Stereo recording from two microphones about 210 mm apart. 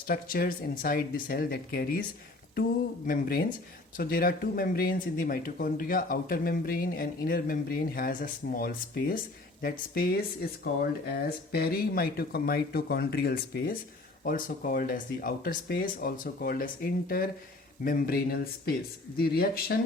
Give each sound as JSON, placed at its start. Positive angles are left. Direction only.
{"t": 0.1, "sound": "speech", "side_deg": 45}
{"t": 3.1, "sound": "speech", "side_deg": 45}